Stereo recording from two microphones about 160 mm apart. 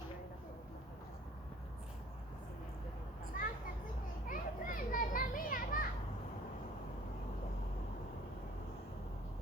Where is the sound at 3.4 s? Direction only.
60° left (ahead or behind).